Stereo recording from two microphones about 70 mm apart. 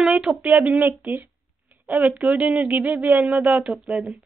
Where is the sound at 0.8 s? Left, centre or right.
Right.